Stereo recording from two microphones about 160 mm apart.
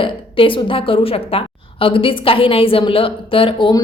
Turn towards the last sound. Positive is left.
turn(degrees=30)  # may be behind; listen again after turning